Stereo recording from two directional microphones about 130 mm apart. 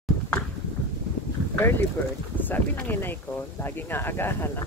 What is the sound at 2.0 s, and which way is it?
Speech, 15° left (ahead or behind).